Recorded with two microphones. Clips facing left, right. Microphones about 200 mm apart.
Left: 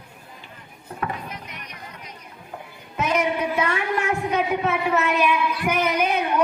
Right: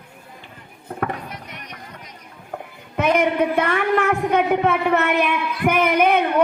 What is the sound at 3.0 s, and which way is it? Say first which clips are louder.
A woman's voice: right 5 dB; 60° right (ahead or behind).